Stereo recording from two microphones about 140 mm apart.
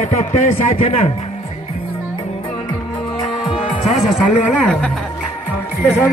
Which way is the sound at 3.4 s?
5° right (ahead or behind).